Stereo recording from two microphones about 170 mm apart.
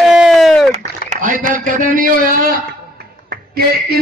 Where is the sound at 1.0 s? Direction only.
50° right (ahead or behind).